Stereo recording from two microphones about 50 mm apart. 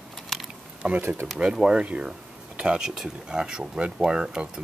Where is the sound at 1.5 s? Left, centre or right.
Centre.